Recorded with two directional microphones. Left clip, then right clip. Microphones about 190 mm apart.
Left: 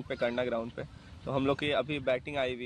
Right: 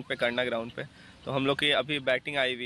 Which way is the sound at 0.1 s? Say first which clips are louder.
Right 3 dB; centre (ahead or behind).